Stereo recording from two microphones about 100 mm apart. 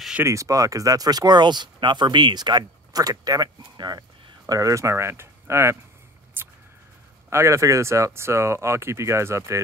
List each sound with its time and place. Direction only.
0.2 s speech: 30° right (ahead or behind)
6.4 s a sound: 20° right (ahead or behind)
7.2 s speech: 30° right (ahead or behind)